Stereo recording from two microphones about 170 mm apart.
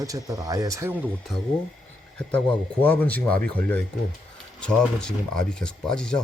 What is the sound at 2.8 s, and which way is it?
Speech, 10° left (ahead or behind).